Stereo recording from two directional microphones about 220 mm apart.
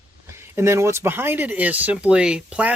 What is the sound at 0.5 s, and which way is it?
Speech, 10° right (ahead or behind).